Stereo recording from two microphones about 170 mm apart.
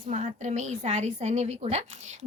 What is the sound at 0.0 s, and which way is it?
A woman's voice, 45° right (ahead or behind).